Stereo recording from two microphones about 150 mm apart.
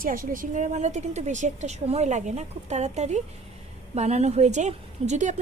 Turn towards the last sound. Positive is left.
turn(degrees=-50)  # may be behind; listen again after turning